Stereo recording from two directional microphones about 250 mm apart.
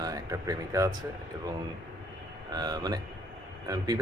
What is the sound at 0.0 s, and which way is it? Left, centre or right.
Speech, centre.